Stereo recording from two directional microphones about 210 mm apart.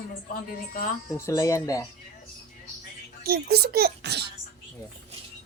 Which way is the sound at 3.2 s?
50° right (ahead or behind).